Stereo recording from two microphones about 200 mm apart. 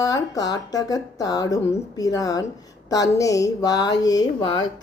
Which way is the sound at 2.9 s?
15° left (ahead or behind).